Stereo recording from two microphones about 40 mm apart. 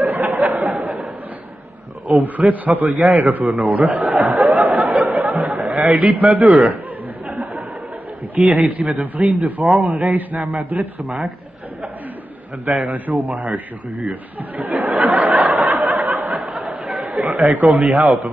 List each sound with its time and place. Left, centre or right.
0.0 s a sound: right
2.0 s a man's voice: right
3.0 s a sound: right
5.0 s chuckle: right
7.2 s a sound: right
8.4 s a man's voice: right
8.6 s a man's voice: right
9.2 s speech: centre
9.8 s a man's voice: right
13.3 s a man's voice: right
14.6 s a sound: right
16.6 s a man's voice: right